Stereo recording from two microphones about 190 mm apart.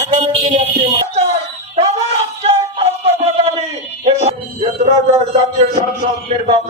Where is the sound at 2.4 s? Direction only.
30° right (ahead or behind).